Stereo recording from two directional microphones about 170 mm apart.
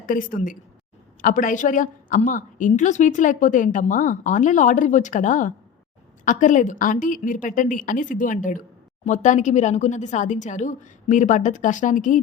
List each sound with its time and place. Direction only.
0.0 s a woman's voice: 55° left (ahead or behind)